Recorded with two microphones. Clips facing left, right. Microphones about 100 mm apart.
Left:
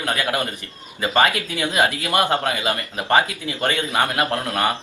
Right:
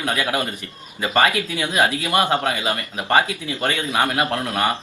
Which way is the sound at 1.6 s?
20° right (ahead or behind).